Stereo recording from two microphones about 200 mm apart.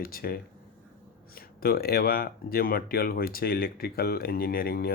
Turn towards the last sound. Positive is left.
turn(degrees=50)  # may be behind; listen again after turning